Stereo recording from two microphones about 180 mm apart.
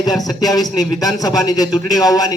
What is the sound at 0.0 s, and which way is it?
A man's voice, 20° left (ahead or behind).